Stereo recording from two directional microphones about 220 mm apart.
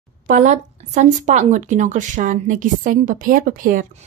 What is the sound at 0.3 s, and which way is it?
A woman's voice, 35° right (ahead or behind).